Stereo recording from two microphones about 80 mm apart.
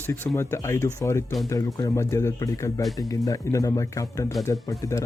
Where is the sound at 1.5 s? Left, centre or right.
Left.